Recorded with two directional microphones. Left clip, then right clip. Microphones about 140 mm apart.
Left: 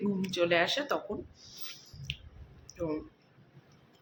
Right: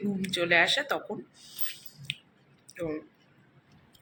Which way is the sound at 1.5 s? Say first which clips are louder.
Right 4 dB; 25° left (ahead or behind).